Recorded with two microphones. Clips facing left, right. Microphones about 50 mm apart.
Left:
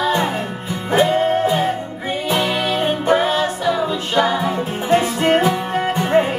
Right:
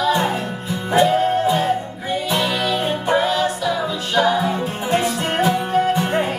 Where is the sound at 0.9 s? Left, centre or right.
Centre.